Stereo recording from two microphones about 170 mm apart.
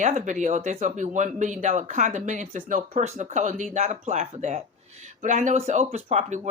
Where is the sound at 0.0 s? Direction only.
45° right (ahead or behind).